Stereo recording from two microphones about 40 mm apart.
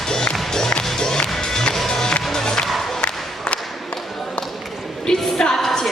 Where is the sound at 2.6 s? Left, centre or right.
Centre.